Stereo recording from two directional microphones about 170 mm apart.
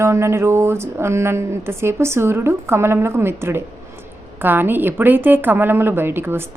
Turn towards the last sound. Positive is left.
turn(degrees=-15)  # may be behind; listen again after turning